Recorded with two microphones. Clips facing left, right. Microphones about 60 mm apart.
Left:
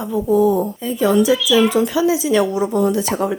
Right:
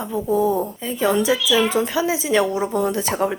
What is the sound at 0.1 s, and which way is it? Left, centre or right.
Speech, right.